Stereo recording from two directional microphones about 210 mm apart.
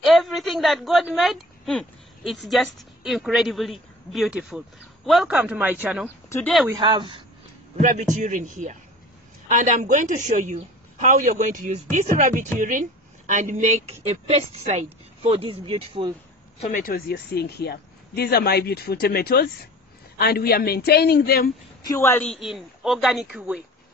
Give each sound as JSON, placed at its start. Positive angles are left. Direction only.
{"t": 0.0, "sound": "a woman's voice", "side_deg": 0}
{"t": 6.0, "sound": "speech", "side_deg": 10}
{"t": 6.7, "sound": "speech", "side_deg": -20}
{"t": 7.8, "sound": "a woman's voice", "side_deg": -35}
{"t": 16.6, "sound": "speech", "side_deg": 40}
{"t": 21.8, "sound": "a man's voice", "side_deg": 10}